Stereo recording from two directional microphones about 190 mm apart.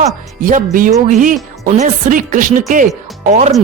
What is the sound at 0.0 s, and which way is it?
Speech, 45° right (ahead or behind).